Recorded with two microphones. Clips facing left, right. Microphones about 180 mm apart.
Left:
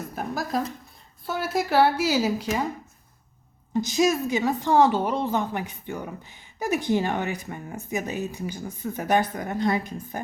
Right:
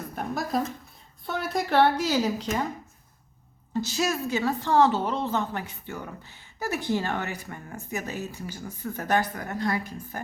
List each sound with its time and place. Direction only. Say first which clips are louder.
0.2 s a woman's voice: even; centre (ahead or behind)
3.7 s a woman's voice: left 5 dB; 15° left (ahead or behind)